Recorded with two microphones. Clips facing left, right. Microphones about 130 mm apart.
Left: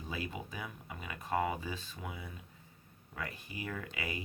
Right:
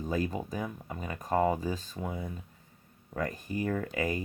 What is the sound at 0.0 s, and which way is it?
Speech, 40° right (ahead or behind).